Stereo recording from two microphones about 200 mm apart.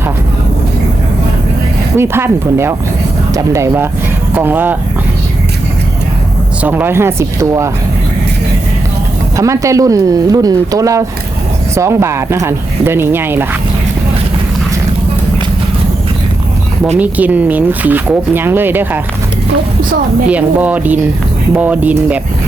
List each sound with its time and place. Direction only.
2.0 s speech: 10° right (ahead or behind)
6.6 s speech: 10° right (ahead or behind)
9.3 s speech: 15° right (ahead or behind)
17.0 s speech: 10° right (ahead or behind)
20.3 s speech: 5° right (ahead or behind)